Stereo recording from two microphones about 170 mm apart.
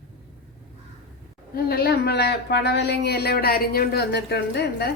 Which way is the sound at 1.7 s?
65° left (ahead or behind).